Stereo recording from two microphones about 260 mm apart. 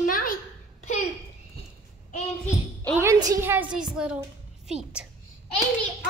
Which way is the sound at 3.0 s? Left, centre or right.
Centre.